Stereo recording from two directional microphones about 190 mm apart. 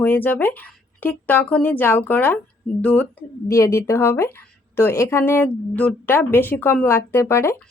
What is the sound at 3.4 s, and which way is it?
Speech, 15° left (ahead or behind).